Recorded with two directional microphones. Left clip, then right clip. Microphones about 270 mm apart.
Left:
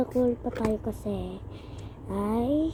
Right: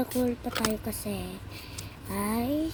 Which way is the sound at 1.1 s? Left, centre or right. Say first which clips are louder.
Left 3 dB; right.